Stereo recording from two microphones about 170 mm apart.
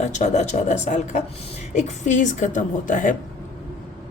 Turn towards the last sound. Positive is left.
turn(degrees=50)  # may be behind; listen again after turning